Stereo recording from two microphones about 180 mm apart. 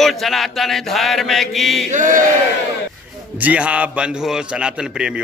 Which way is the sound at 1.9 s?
45° right (ahead or behind).